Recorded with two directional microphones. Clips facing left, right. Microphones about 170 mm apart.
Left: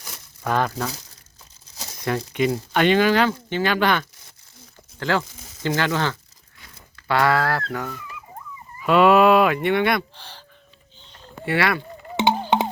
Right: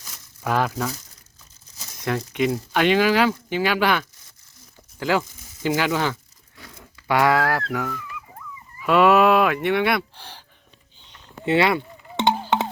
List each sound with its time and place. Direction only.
0.4 s speech: 5° right (ahead or behind)
2.0 s speech: centre (ahead or behind)
11.4 s speech: 20° right (ahead or behind)
12.2 s music: 5° left (ahead or behind)